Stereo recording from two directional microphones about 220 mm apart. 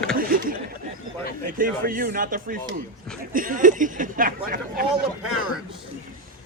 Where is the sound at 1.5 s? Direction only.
40° right (ahead or behind).